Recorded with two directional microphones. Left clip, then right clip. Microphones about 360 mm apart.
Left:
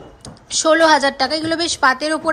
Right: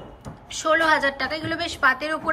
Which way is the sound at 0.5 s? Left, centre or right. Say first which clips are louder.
Left 7 dB; centre.